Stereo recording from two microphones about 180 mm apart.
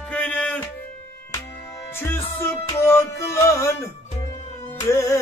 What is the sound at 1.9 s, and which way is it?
Music, 15° left (ahead or behind).